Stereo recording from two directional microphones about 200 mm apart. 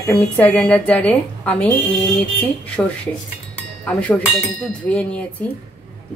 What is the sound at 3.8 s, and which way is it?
A woman's voice, 5° left (ahead or behind).